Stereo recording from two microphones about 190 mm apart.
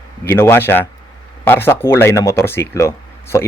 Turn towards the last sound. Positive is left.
turn(degrees=15)  # may be behind; listen again after turning